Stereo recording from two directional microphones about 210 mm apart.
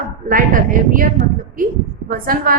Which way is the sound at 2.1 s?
45° right (ahead or behind).